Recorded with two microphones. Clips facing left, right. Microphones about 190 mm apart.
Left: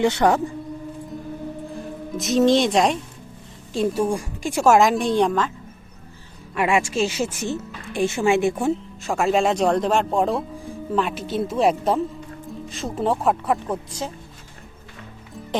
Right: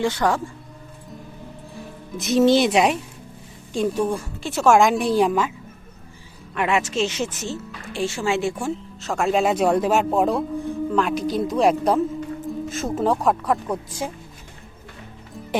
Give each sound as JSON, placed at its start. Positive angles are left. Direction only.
{"t": 0.0, "sound": "speech", "side_deg": 20}
{"t": 2.1, "sound": "a woman's voice", "side_deg": 0}
{"t": 6.5, "sound": "speech", "side_deg": 10}
{"t": 9.2, "sound": "a woman's voice", "side_deg": 0}
{"t": 14.0, "sound": "speech", "side_deg": -10}